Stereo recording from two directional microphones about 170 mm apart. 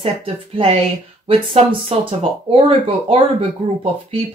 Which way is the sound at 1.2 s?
30° right (ahead or behind).